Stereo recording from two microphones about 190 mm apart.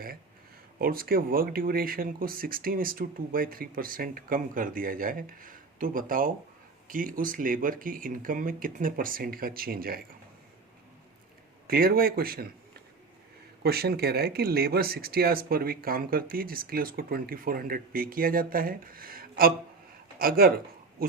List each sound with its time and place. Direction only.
0.8 s speech: 50° right (ahead or behind)
11.7 s speech: 50° right (ahead or behind)
13.6 s speech: 55° right (ahead or behind)
21.0 s pig: 50° right (ahead or behind)